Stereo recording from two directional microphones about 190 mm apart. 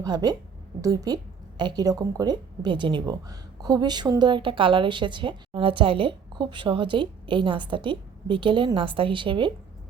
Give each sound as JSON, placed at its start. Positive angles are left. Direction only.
{"t": 0.0, "sound": "a woman's voice", "side_deg": -20}